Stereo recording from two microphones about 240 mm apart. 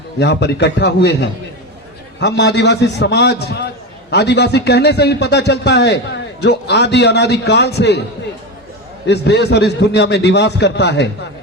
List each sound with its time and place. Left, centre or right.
0.2 s a man's voice: left
9.0 s a man's voice: left